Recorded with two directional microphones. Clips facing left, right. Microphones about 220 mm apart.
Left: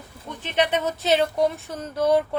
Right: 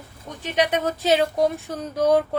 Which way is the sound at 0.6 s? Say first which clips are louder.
Right 1 dB; 10° right (ahead or behind).